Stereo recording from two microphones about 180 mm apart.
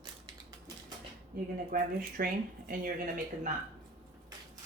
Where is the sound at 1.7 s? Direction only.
50° right (ahead or behind).